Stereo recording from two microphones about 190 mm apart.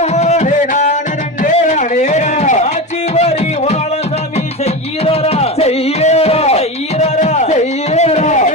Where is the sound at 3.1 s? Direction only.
35° left (ahead or behind).